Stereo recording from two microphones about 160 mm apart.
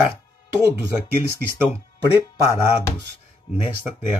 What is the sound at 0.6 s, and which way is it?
Speech, 15° right (ahead or behind).